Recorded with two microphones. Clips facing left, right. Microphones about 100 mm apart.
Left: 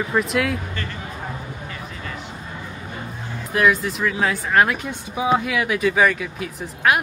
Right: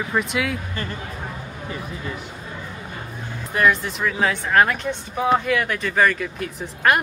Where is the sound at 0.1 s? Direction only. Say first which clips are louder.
Left 2 dB; centre (ahead or behind).